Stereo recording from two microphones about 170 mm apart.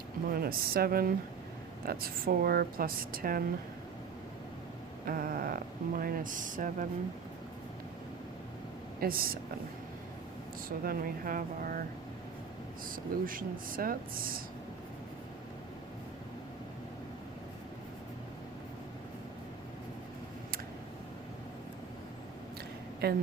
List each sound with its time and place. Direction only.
0.3 s speech: 60° right (ahead or behind)
5.0 s speech: 55° right (ahead or behind)
9.0 s speech: 60° right (ahead or behind)
10.8 s speech: 55° right (ahead or behind)
13.2 s speech: 55° right (ahead or behind)
23.0 s speech: 65° right (ahead or behind)